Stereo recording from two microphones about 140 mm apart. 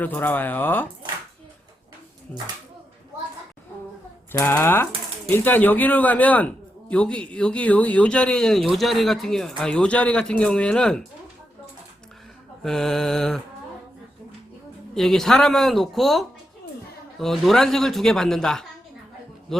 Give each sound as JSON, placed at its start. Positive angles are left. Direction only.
{"t": 0.0, "sound": "a man's voice", "side_deg": 10}
{"t": 4.3, "sound": "a man's voice", "side_deg": 20}
{"t": 12.6, "sound": "a man's voice", "side_deg": 5}
{"t": 14.9, "sound": "a man's voice", "side_deg": 0}